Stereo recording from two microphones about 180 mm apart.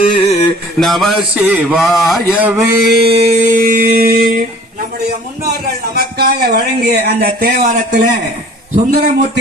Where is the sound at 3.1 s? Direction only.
40° right (ahead or behind); by 4.3 s 55° right (ahead or behind).